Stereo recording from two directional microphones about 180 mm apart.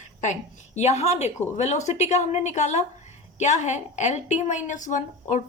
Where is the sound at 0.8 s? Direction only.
40° left (ahead or behind).